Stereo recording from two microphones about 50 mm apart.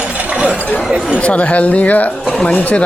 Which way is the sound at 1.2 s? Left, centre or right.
Left.